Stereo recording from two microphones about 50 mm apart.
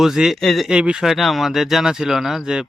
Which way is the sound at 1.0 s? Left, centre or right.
Centre.